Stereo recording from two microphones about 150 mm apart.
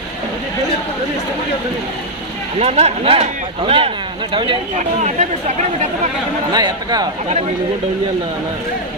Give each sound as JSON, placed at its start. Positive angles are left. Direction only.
{"t": 2.6, "sound": "speech", "side_deg": -45}
{"t": 6.5, "sound": "speech", "side_deg": -25}